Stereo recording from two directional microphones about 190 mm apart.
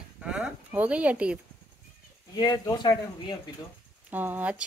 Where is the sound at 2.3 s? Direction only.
20° left (ahead or behind).